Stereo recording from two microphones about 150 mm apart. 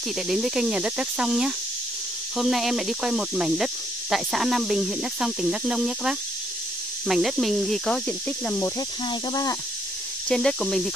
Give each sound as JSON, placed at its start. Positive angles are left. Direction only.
{"t": 0.3, "sound": "speech", "side_deg": -5}
{"t": 8.5, "sound": "speech", "side_deg": 20}
{"t": 10.3, "sound": "speech", "side_deg": 5}